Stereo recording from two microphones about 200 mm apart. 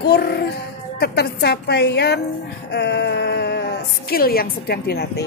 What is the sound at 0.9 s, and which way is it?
Speech, 55° left (ahead or behind).